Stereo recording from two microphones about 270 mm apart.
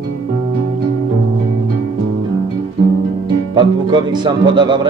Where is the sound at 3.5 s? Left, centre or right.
Centre.